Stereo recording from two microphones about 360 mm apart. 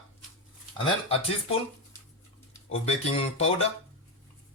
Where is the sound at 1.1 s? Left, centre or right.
Centre.